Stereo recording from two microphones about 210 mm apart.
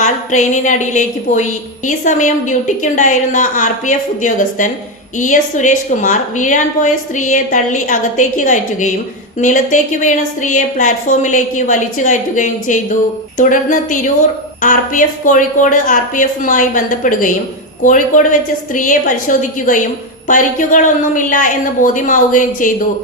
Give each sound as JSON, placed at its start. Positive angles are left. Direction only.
{"t": 0.0, "sound": "a woman's voice", "side_deg": 35}